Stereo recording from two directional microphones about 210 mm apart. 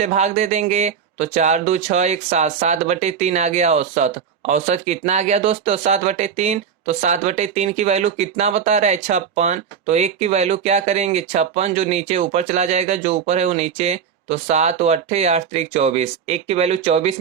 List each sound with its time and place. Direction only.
0.0 s speech: 35° right (ahead or behind)